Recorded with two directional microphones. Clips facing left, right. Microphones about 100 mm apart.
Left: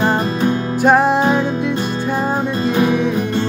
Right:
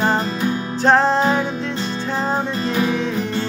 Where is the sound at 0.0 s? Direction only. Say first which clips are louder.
Left 3 dB; 15° left (ahead or behind).